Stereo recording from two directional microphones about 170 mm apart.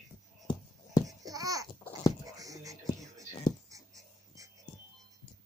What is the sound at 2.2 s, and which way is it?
Music, 20° right (ahead or behind).